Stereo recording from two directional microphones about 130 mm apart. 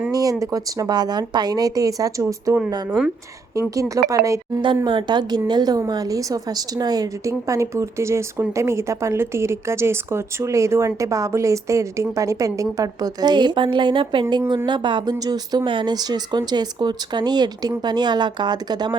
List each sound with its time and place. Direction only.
0.1 s a woman's voice: 25° right (ahead or behind)
4.9 s a woman's voice: 35° right (ahead or behind)